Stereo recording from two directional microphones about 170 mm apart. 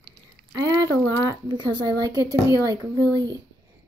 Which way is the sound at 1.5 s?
25° right (ahead or behind).